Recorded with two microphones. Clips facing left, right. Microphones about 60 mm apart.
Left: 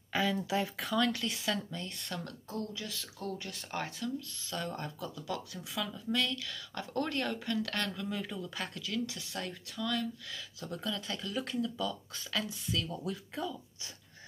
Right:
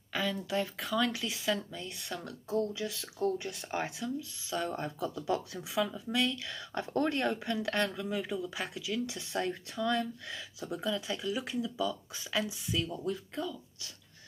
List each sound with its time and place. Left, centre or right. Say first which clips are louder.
0.1 s speech: left 2 dB; centre
2.5 s speech: right 7 dB; centre
13.0 s speech: right 2 dB; centre